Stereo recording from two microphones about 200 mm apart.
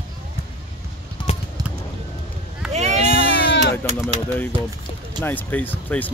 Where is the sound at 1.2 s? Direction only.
20° left (ahead or behind).